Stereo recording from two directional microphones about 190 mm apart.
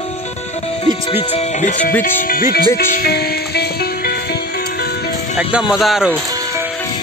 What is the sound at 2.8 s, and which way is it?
Music, 50° left (ahead or behind).